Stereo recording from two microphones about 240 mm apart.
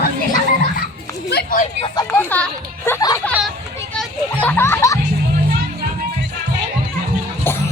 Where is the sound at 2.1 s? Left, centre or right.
Centre.